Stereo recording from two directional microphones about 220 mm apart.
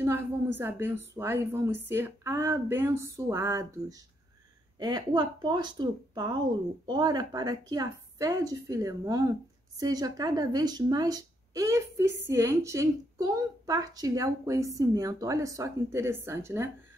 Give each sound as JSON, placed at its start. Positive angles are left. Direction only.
{"t": 0.0, "sound": "a woman's voice", "side_deg": -10}